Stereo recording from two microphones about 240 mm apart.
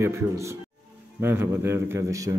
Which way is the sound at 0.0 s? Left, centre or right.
Centre.